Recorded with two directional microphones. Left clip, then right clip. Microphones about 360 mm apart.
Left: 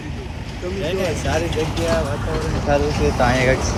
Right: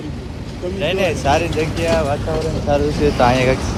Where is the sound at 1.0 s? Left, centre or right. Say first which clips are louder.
Right 6 dB; centre.